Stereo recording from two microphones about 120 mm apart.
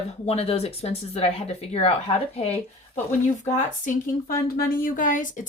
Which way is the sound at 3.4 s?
90° left.